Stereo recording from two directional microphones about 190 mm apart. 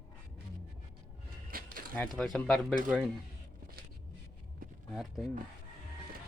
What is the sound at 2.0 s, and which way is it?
Speech, centre (ahead or behind).